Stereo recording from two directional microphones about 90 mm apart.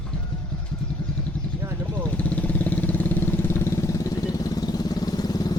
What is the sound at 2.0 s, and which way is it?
Vehicle, 15° left (ahead or behind).